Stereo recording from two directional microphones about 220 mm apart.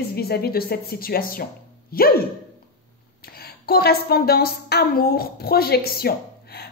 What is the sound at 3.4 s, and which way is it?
A woman's voice, 45° left (ahead or behind).